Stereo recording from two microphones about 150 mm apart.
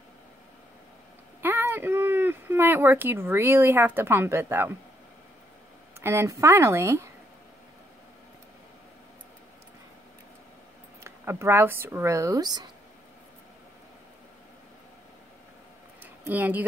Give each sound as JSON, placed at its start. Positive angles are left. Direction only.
{"t": 1.4, "sound": "speech", "side_deg": -15}
{"t": 5.9, "sound": "speech", "side_deg": -15}
{"t": 11.1, "sound": "speech", "side_deg": -15}
{"t": 16.0, "sound": "a sound", "side_deg": -10}